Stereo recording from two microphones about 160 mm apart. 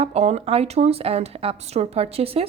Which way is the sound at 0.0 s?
40° right (ahead or behind).